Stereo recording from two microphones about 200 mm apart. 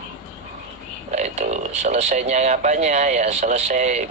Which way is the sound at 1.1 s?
35° right (ahead or behind).